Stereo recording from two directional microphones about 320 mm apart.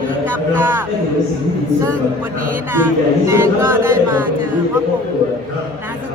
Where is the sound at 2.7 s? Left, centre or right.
Centre.